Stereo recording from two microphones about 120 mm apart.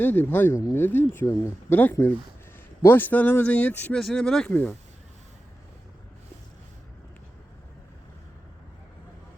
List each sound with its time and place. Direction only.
0.0 s speech: 15° left (ahead or behind)